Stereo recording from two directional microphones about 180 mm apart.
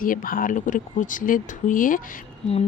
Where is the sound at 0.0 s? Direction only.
50° left (ahead or behind).